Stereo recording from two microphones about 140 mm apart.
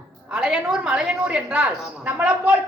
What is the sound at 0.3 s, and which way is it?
A woman's voice, 10° right (ahead or behind).